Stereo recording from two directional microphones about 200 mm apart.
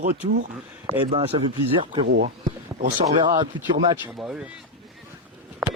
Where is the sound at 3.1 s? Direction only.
25° right (ahead or behind).